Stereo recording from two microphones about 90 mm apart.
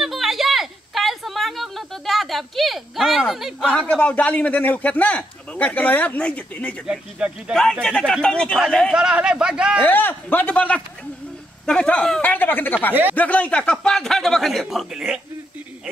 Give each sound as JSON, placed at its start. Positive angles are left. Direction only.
{"t": 0.0, "sound": "a sound", "side_deg": 0}
{"t": 3.7, "sound": "a man's voice", "side_deg": 15}
{"t": 6.9, "sound": "speech", "side_deg": -10}
{"t": 7.8, "sound": "a man's voice", "side_deg": 10}
{"t": 8.9, "sound": "speech", "side_deg": -10}
{"t": 9.8, "sound": "a man's voice", "side_deg": 20}
{"t": 12.2, "sound": "a man's voice", "side_deg": 20}